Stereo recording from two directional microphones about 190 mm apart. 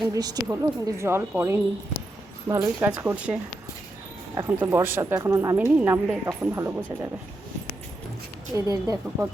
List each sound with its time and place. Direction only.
0.1 s a woman's voice: 20° right (ahead or behind)
4.4 s a woman's voice: 15° right (ahead or behind)
8.5 s a woman's voice: 15° right (ahead or behind)